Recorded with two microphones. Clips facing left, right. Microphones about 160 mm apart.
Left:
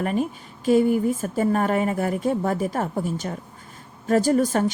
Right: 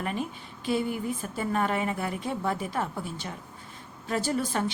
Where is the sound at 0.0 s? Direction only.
45° left (ahead or behind).